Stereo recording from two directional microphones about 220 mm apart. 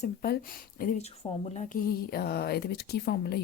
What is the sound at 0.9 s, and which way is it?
Speech, 30° left (ahead or behind).